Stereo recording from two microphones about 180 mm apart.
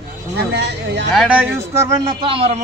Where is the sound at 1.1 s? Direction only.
10° right (ahead or behind); by 2.6 s 35° right (ahead or behind).